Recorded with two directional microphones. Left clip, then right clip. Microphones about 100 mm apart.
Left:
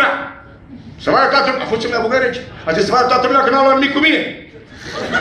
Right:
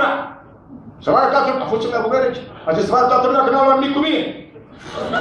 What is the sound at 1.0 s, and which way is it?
A man's voice, 20° right (ahead or behind).